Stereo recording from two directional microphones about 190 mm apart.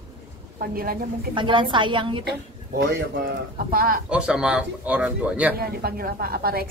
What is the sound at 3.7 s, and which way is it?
Speech, 50° right (ahead or behind).